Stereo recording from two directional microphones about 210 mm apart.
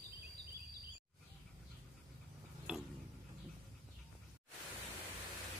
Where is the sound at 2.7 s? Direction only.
5° right (ahead or behind).